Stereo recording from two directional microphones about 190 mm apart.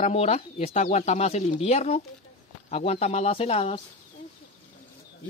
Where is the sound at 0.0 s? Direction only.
35° left (ahead or behind).